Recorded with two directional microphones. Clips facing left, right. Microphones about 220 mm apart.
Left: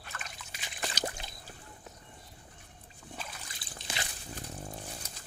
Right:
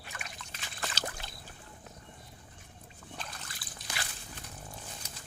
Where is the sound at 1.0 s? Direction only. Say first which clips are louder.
Left 6 dB; 25° left (ahead or behind).